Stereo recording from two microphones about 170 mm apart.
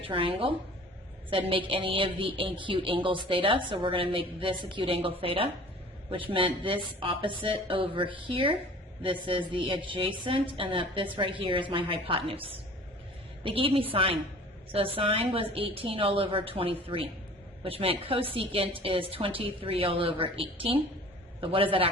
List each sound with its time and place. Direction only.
0.0 s speech: 30° right (ahead or behind)